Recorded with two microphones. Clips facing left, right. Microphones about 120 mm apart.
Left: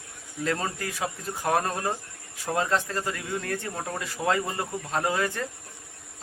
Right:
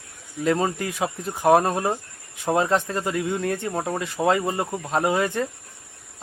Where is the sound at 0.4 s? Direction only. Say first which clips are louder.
Right 7 dB; 20° right (ahead or behind).